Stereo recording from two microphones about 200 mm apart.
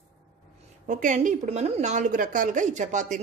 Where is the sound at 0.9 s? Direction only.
40° right (ahead or behind).